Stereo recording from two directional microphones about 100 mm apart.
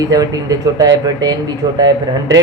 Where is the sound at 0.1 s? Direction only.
40° right (ahead or behind).